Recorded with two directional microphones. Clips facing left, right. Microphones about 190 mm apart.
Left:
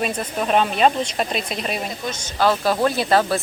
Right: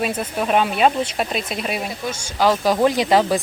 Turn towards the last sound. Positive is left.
turn(degrees=-15)  # may be behind; listen again after turning